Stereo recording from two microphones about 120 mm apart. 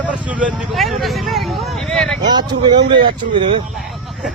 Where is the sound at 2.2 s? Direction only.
35° right (ahead or behind).